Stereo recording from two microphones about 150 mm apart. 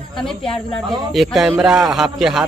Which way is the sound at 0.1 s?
5° left (ahead or behind).